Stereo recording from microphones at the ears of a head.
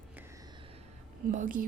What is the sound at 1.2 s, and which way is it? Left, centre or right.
Speech, right.